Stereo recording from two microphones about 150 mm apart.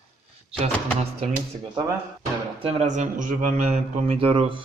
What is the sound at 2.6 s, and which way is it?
Speech, 40° right (ahead or behind).